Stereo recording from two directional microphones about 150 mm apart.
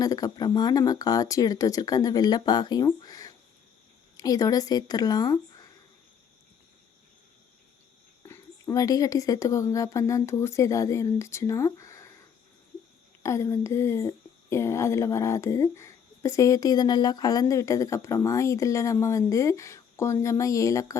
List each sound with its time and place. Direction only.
0.0 s speech: 25° left (ahead or behind)
8.2 s speech: 20° left (ahead or behind)
13.2 s speech: 20° left (ahead or behind)